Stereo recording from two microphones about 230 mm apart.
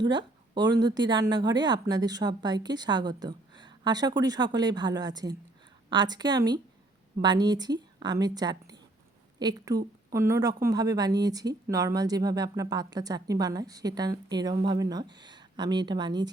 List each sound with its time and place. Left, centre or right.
0.0 s speech: centre